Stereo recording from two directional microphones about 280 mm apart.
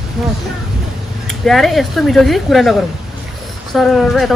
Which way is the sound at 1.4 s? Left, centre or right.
Centre.